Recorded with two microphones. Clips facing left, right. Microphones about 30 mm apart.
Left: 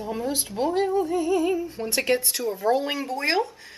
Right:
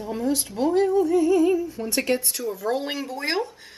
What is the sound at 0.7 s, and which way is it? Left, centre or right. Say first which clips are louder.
Speech: right 5 dB; centre.